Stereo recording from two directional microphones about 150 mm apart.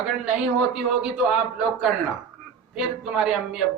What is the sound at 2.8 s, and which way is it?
Speech, 5° right (ahead or behind).